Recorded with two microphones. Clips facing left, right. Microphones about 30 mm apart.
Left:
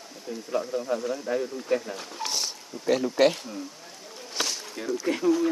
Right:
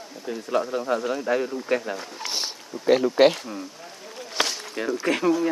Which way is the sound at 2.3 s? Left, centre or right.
Right.